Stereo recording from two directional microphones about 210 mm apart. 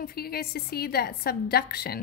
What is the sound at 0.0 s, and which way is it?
Speech, 45° left (ahead or behind).